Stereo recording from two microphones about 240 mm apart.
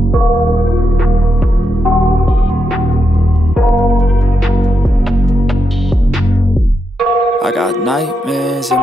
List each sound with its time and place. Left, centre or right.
3.5 s music: centre
7.0 s speech: centre